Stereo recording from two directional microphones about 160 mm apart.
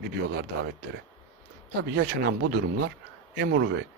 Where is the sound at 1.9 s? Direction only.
90° right.